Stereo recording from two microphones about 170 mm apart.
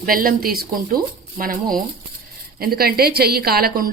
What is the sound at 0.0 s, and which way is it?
Speech, 55° right (ahead or behind).